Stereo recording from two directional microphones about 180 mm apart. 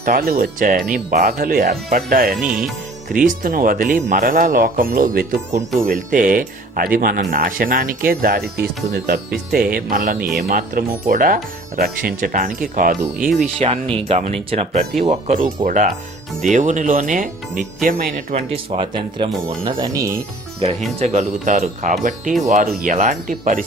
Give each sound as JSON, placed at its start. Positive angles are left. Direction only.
{"t": 0.0, "sound": "speech", "side_deg": -55}
{"t": 2.4, "sound": "music", "side_deg": -5}
{"t": 3.1, "sound": "speech", "side_deg": -50}
{"t": 13.6, "sound": "speech", "side_deg": -35}
{"t": 15.6, "sound": "speech", "side_deg": -45}
{"t": 21.0, "sound": "speech", "side_deg": -40}